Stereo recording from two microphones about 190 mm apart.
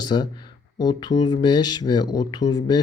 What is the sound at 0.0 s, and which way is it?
Speech, 20° left (ahead or behind).